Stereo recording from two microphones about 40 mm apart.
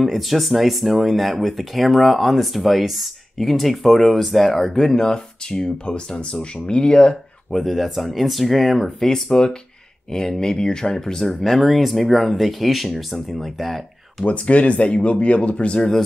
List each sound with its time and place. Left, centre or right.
0.0 s speech: centre; by 7.2 s left
7.5 s speech: centre
11.4 s speech: centre
14.2 s speech: left